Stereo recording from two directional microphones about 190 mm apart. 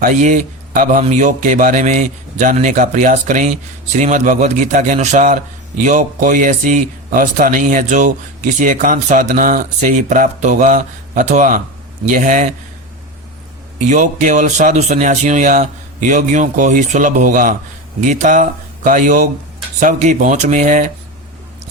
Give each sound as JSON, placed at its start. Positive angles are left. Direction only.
{"t": 0.0, "sound": "a man's voice", "side_deg": -40}
{"t": 13.7, "sound": "a man's voice", "side_deg": -40}